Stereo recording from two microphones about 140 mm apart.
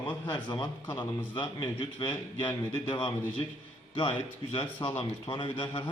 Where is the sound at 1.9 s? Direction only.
35° left (ahead or behind).